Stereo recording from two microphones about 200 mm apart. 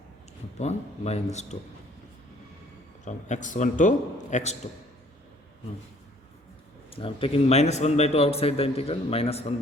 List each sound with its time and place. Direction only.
0.6 s a man's voice: 30° left (ahead or behind)
3.0 s a man's voice: 35° left (ahead or behind)
6.9 s a man's voice: 25° left (ahead or behind)